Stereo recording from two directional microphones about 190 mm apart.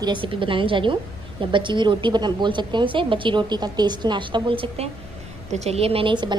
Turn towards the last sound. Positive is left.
turn(degrees=-25)  # may be behind; listen again after turning